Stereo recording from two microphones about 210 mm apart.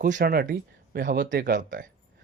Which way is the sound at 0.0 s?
40° right (ahead or behind).